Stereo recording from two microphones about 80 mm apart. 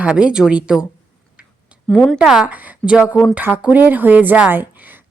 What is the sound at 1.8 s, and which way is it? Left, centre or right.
Speech, centre.